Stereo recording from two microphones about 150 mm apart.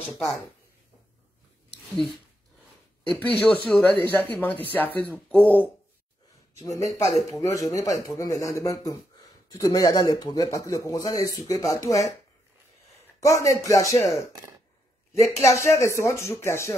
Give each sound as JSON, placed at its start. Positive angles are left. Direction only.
{"t": 0.0, "sound": "speech", "side_deg": 0}
{"t": 3.2, "sound": "speech", "side_deg": 10}
{"t": 6.6, "sound": "speech", "side_deg": 20}
{"t": 13.2, "sound": "speech", "side_deg": 20}
{"t": 15.4, "sound": "speech", "side_deg": 20}